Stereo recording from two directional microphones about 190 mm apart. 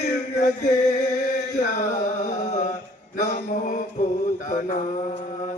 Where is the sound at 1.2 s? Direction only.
45° left (ahead or behind).